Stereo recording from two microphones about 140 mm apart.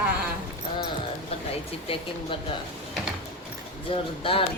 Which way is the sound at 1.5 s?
40° left (ahead or behind).